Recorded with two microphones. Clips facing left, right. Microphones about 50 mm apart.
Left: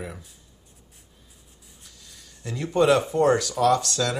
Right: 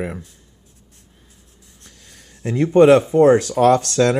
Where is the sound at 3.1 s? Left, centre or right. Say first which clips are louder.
Right 8 dB; right.